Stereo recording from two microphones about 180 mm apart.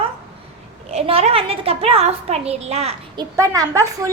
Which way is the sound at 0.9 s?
35° right (ahead or behind).